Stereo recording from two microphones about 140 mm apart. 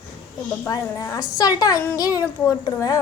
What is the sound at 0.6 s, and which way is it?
A woman's voice, 25° left (ahead or behind).